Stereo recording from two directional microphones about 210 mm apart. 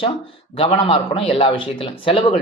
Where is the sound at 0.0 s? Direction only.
25° left (ahead or behind).